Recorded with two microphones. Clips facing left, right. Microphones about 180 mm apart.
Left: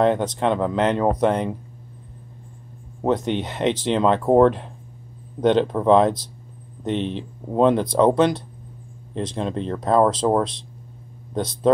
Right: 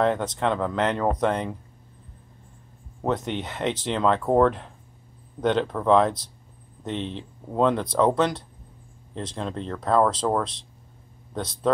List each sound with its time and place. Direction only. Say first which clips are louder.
0.0 s speech: left 4 dB; 15° left (ahead or behind)
3.0 s speech: left 5 dB; 15° left (ahead or behind)
11.3 s speech: left 5 dB; 20° left (ahead or behind)